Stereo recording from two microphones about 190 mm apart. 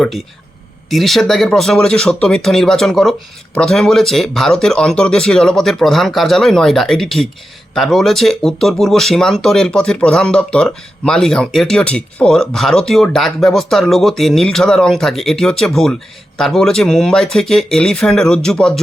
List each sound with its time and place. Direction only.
0.9 s speech: centre (ahead or behind)